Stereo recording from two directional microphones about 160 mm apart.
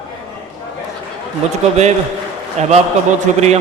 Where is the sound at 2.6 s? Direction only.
45° right (ahead or behind).